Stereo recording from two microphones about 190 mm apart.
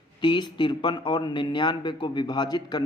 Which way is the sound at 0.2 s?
25° left (ahead or behind).